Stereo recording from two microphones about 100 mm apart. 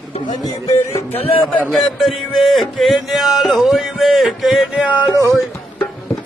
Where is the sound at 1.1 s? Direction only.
75° left (ahead or behind).